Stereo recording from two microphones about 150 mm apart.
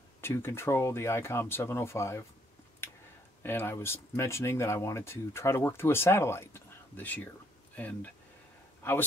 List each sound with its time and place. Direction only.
0.2 s speech: 15° left (ahead or behind)
2.8 s a sound: 15° left (ahead or behind)
3.4 s speech: 15° left (ahead or behind)